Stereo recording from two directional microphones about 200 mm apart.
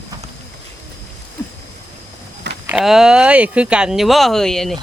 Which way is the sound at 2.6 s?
5° right (ahead or behind).